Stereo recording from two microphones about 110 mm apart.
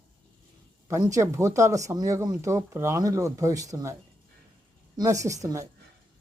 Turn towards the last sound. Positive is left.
turn(degrees=-30)  # may be behind; listen again after turning